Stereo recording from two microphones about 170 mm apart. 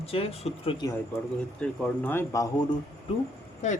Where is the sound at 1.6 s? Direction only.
10° left (ahead or behind).